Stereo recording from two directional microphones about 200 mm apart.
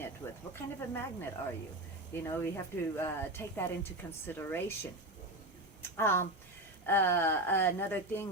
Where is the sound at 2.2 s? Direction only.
15° left (ahead or behind).